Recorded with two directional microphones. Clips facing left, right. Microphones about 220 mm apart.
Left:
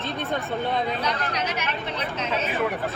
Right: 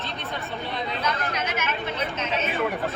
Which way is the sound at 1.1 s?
35° left (ahead or behind).